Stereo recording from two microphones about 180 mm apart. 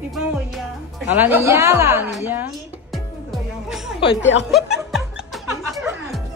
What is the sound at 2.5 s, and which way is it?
Music, centre (ahead or behind).